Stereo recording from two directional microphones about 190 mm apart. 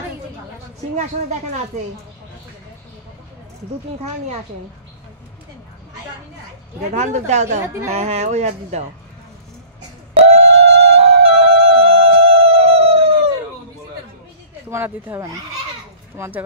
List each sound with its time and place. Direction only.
6.9 s speech: 35° right (ahead or behind)
10.2 s music: 35° right (ahead or behind)
14.7 s speech: 15° right (ahead or behind)